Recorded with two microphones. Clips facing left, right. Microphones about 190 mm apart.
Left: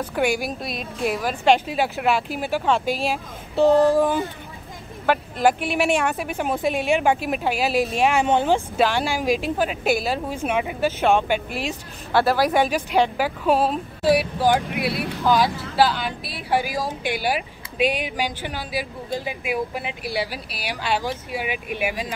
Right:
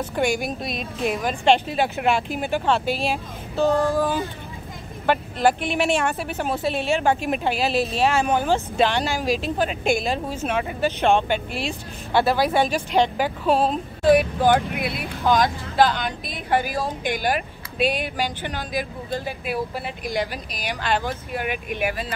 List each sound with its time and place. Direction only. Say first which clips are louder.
0.1 s a woman's voice: left 1 dB; 5° left (ahead or behind)
3.5 s a sound: left 4 dB; 20° left (ahead or behind)
5.0 s speech: even; 5° left (ahead or behind)
8.5 s a woman's voice: even; 5° left (ahead or behind)